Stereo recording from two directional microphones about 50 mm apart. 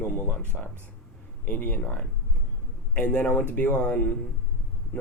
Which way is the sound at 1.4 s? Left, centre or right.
Left.